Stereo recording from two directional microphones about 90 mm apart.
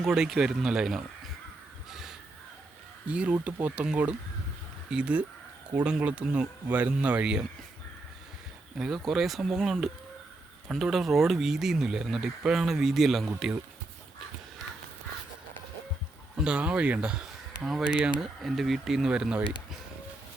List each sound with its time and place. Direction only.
0.0 s speech: 5° right (ahead or behind)
1.9 s crow: 5° right (ahead or behind)
3.1 s speech: 15° right (ahead or behind)
4.9 s speech: 15° right (ahead or behind)
8.8 s speech: centre (ahead or behind)
16.4 s speech: 10° right (ahead or behind)